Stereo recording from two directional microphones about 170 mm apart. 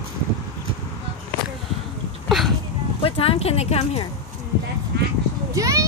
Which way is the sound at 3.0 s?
35° left (ahead or behind).